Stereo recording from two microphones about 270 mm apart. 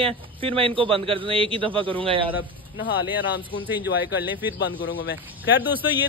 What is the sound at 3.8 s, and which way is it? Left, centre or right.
Speech, left.